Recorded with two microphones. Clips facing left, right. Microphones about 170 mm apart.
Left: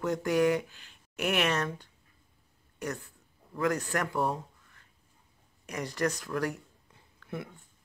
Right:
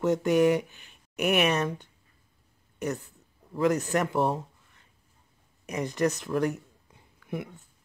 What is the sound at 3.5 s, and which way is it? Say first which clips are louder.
Speech: right 5 dB; 20° right (ahead or behind).